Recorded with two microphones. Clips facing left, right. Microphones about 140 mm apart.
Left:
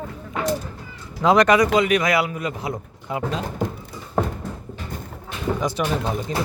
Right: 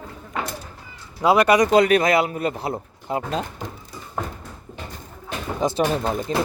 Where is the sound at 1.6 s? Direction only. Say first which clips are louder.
Right 2 dB; 40° right (ahead or behind).